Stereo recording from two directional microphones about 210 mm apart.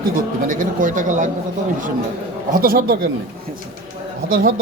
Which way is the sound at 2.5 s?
45° right (ahead or behind).